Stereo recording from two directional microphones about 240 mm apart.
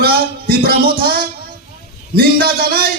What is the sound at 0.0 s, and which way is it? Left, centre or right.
Music, right.